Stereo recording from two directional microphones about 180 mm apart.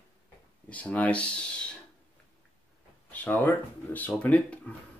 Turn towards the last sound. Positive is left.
turn(degrees=10)  # may be behind; listen again after turning